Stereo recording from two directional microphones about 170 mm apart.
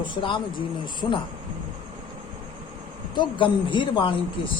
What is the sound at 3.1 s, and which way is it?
A man's voice, 30° left (ahead or behind).